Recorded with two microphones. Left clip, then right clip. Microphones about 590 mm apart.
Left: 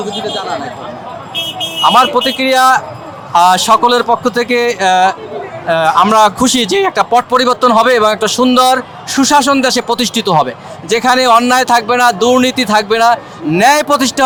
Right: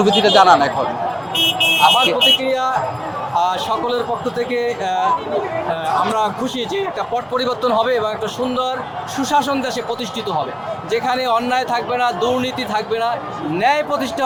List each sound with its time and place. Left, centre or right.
0.3 s a man's voice: right
2.0 s speech: left